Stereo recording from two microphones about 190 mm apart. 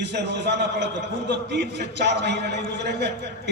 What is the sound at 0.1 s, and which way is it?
A man's voice, 65° right (ahead or behind).